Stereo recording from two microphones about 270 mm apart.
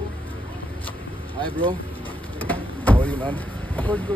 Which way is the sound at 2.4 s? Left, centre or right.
Centre.